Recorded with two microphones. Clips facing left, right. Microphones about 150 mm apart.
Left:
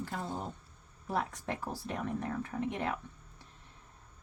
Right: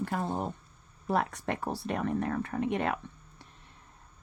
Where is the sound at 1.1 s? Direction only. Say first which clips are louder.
Right 5 dB; 70° right (ahead or behind).